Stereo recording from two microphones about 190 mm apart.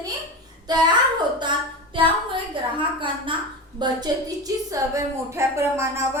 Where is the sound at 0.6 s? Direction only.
20° right (ahead or behind).